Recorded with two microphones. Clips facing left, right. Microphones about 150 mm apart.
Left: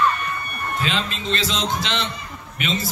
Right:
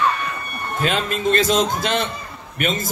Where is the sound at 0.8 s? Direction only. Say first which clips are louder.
Right 6 dB; 50° right (ahead or behind).